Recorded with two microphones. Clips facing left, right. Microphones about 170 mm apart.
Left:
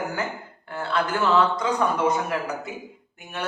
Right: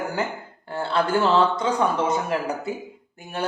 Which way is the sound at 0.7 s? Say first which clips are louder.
Right 3 dB; 30° right (ahead or behind).